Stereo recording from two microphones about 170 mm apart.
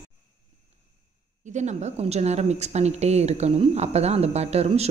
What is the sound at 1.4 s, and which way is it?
Speech, 45° right (ahead or behind).